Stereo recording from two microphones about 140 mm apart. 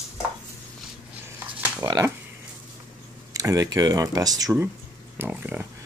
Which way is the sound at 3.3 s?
25° right (ahead or behind).